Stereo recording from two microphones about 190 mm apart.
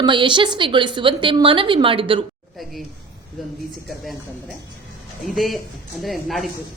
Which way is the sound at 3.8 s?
Centre (ahead or behind).